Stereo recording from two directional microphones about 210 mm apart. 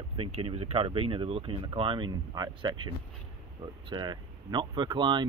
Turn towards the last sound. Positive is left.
turn(degrees=-20)  # may be behind; listen again after turning